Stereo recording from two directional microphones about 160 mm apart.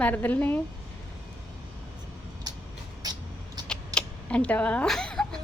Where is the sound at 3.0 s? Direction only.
25° right (ahead or behind).